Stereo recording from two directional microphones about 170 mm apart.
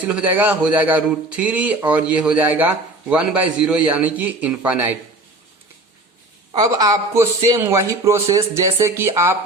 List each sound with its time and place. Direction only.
0.0 s a man's voice: 10° right (ahead or behind)
6.5 s a man's voice: 20° right (ahead or behind)